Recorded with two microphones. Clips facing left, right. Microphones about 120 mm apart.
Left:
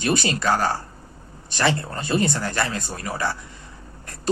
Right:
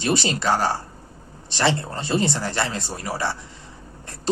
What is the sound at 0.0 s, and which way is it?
Speech, 25° right (ahead or behind).